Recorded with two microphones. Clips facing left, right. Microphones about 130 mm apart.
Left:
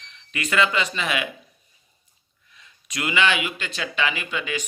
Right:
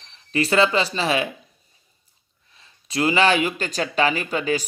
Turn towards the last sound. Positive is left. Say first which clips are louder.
# right 6 dB
turn(degrees=-40)  # may be behind; listen again after turning